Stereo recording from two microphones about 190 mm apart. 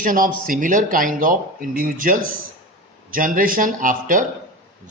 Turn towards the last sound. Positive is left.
turn(degrees=-45)  # may be behind; listen again after turning